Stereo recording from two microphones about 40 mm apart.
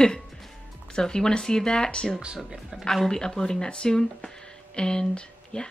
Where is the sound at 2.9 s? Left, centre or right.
Centre.